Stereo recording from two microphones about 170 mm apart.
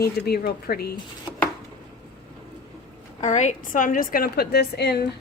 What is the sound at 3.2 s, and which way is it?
A woman's voice, 45° left (ahead or behind).